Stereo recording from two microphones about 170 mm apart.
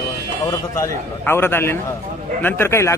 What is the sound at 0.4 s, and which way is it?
A man's voice, 20° left (ahead or behind).